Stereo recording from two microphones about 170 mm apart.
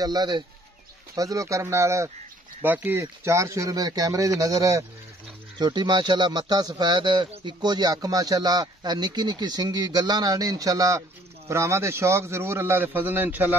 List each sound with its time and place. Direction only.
0.0 s a man's voice: 25° right (ahead or behind)